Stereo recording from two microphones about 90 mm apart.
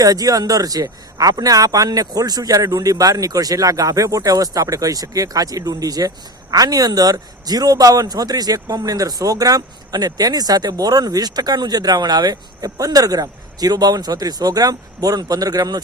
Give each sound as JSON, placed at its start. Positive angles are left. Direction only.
{"t": 0.0, "sound": "a man's voice", "side_deg": -45}